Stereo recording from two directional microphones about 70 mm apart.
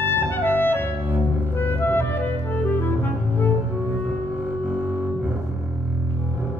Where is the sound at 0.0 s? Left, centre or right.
Left.